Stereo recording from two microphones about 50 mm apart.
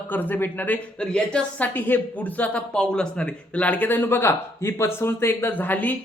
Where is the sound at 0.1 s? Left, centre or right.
Left.